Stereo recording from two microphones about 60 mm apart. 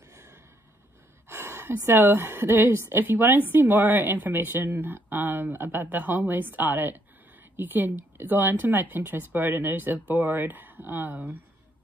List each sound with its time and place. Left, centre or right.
0.1 s gasp: right
1.3 s a sound: right
1.9 s a woman's voice: right